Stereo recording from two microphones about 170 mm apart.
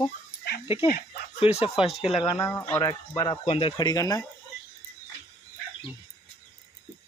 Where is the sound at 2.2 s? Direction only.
15° left (ahead or behind).